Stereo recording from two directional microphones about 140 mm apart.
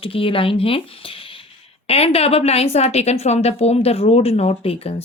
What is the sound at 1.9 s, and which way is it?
A woman's voice, 45° left (ahead or behind).